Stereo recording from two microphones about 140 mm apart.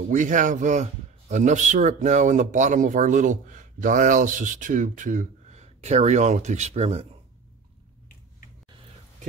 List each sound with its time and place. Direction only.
0.1 s speech: 65° right (ahead or behind); by 7.1 s 50° right (ahead or behind)